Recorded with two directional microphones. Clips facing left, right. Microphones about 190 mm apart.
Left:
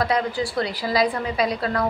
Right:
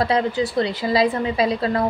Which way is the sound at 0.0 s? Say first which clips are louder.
Right 3 dB; 25° right (ahead or behind).